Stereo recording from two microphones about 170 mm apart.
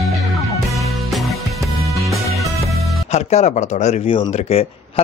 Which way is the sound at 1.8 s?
Centre (ahead or behind).